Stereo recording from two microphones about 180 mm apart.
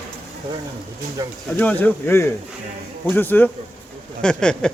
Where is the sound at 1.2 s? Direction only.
20° right (ahead or behind).